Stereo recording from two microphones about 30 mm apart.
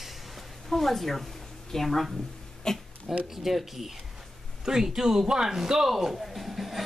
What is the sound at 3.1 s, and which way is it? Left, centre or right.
A man's voice, centre.